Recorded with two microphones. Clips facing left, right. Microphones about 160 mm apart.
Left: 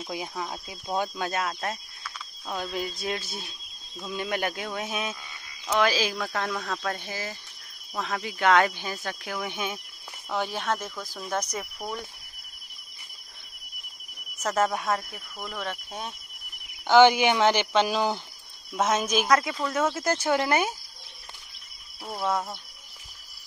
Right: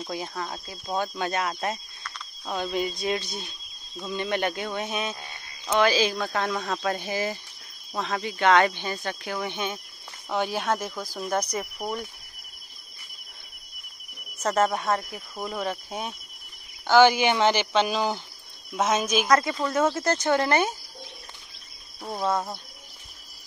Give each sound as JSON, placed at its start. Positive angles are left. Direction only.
{"t": 0.0, "sound": "speech", "side_deg": 10}
{"t": 1.1, "sound": "speech", "side_deg": 0}
{"t": 8.0, "sound": "speech", "side_deg": 0}
{"t": 10.4, "sound": "speech", "side_deg": -5}
{"t": 14.4, "sound": "speech", "side_deg": 5}
{"t": 15.3, "sound": "speech", "side_deg": -25}
{"t": 15.6, "sound": "speech", "side_deg": -10}
{"t": 16.8, "sound": "speech", "side_deg": 15}
{"t": 18.8, "sound": "speech", "side_deg": -10}
{"t": 19.2, "sound": "speech", "side_deg": 0}
{"t": 22.0, "sound": "speech", "side_deg": -20}
{"t": 22.3, "sound": "speech", "side_deg": -5}